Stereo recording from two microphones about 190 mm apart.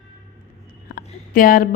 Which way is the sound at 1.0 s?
50° left (ahead or behind).